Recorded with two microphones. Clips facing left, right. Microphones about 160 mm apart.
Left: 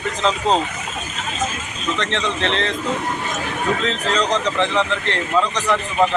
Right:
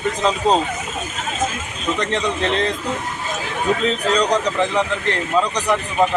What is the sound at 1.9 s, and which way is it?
Speech, 15° right (ahead or behind).